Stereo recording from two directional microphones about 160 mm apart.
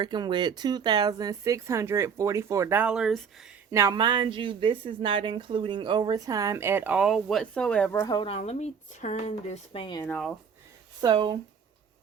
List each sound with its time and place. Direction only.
0.0 s speech: 30° right (ahead or behind); by 3.2 s 5° right (ahead or behind)
3.7 s speech: 20° right (ahead or behind); by 8.0 s 10° left (ahead or behind)
8.0 s speech: 25° left (ahead or behind)
8.3 s speech: 45° left (ahead or behind)
9.8 s speech: 25° left (ahead or behind)
10.1 s speech: 5° left (ahead or behind)
11.0 s speech: 25° right (ahead or behind)